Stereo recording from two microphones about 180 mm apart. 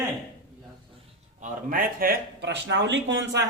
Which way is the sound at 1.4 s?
50° right (ahead or behind).